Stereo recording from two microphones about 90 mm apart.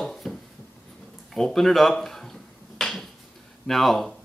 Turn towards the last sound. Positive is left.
turn(degrees=0)  # may be behind; listen again after turning